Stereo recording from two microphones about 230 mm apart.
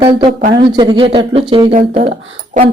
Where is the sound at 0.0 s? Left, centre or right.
Right.